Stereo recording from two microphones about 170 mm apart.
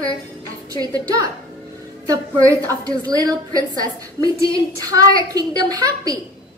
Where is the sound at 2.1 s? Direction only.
20° right (ahead or behind).